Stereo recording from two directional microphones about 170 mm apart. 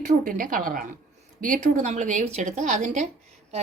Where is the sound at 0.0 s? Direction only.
50° right (ahead or behind).